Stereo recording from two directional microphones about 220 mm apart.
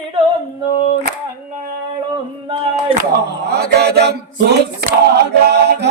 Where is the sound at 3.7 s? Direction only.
50° right (ahead or behind).